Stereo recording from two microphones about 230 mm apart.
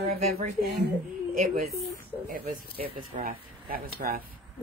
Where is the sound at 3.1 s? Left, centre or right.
Right.